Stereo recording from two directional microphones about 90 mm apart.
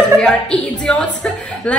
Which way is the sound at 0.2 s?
10° left (ahead or behind).